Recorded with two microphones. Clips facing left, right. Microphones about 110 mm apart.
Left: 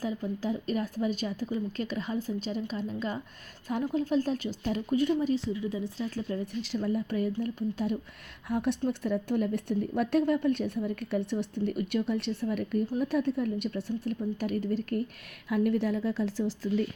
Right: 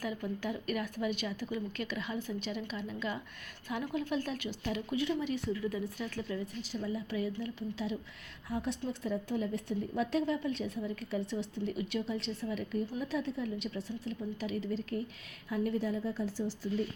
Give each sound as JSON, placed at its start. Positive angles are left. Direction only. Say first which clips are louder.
{"t": 0.0, "sound": "speech", "louder": "left 4 dB", "side_deg": 30}
{"t": 5.3, "sound": "speech", "louder": "left 4 dB", "side_deg": 25}
{"t": 6.0, "sound": "speech", "louder": "left 4 dB", "side_deg": 40}
{"t": 6.4, "sound": "a woman's voice", "louder": "left 6 dB", "side_deg": 85}
{"t": 8.4, "sound": "a woman's voice", "louder": "left 7 dB", "side_deg": 65}